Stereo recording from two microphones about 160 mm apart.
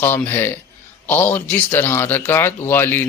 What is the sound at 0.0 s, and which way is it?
Speech, 15° left (ahead or behind).